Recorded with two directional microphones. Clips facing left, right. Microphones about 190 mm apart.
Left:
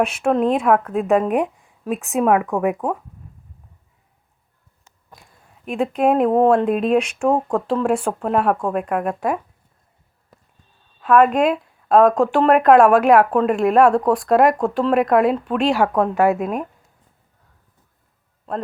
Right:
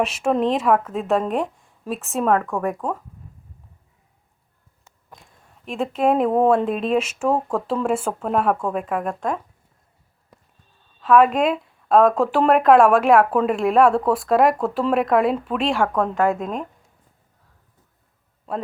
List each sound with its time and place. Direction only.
0.2 s speech: centre (ahead or behind)
1.6 s a sound: centre (ahead or behind)
2.2 s speech: 10° left (ahead or behind)
5.1 s speech: centre (ahead or behind)
11.0 s speech: centre (ahead or behind)